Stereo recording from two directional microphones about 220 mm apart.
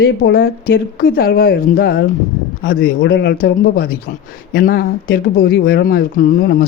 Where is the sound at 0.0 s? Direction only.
45° left (ahead or behind).